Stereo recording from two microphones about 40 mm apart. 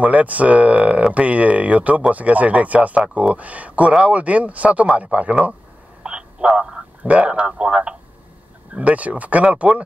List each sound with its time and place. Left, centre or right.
0.0 s speech: right
6.0 s telephone: right
7.0 s speech: right
8.7 s speech: right